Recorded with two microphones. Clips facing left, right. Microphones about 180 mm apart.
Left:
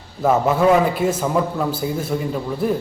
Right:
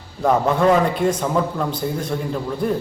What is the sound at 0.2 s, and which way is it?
A man's voice, 5° left (ahead or behind).